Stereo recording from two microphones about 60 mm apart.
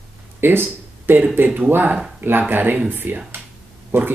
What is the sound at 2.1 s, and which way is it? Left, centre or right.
Speech, right.